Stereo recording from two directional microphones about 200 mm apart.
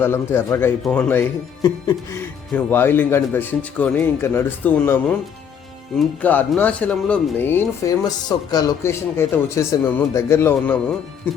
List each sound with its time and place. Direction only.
0.0 s speech: 10° left (ahead or behind)